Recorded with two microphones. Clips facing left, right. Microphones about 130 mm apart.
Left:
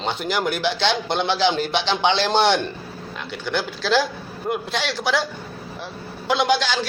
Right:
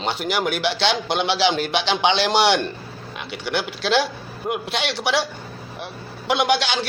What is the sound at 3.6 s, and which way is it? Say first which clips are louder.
A man's voice: even; 20° right (ahead or behind).